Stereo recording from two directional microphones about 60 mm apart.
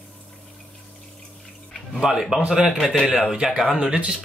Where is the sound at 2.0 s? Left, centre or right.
Centre.